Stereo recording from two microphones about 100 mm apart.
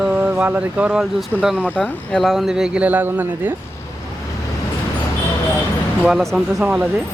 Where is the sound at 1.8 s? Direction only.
Centre (ahead or behind); by 3.5 s 20° right (ahead or behind).